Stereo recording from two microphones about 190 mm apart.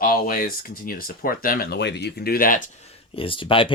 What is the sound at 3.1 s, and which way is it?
Speech, 30° left (ahead or behind).